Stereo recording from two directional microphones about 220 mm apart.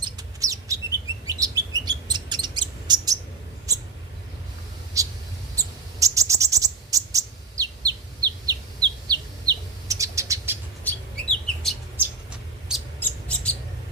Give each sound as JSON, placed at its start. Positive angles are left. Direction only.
{"t": 0.0, "sound": "chirp", "side_deg": -15}
{"t": 3.7, "sound": "mouse", "side_deg": -15}
{"t": 4.9, "sound": "a sound", "side_deg": -15}
{"t": 6.0, "sound": "cricket", "side_deg": -15}
{"t": 10.8, "sound": "bird", "side_deg": 5}
{"t": 13.0, "sound": "bird", "side_deg": 5}